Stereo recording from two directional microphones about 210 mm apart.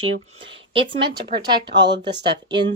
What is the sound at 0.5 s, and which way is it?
Speech, 25° right (ahead or behind).